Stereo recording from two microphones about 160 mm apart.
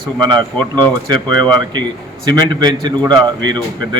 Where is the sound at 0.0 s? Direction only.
25° right (ahead or behind).